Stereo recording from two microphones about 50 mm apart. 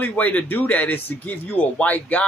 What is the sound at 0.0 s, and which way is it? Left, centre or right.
Speech, left.